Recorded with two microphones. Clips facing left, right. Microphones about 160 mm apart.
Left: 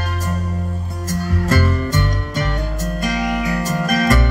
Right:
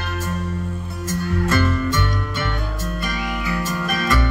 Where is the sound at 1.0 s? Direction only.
40° left (ahead or behind).